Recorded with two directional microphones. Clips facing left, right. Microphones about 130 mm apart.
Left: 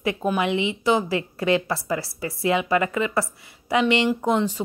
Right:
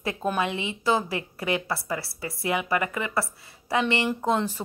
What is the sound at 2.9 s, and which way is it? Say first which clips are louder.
A woman's voice: left 5 dB; 20° left (ahead or behind).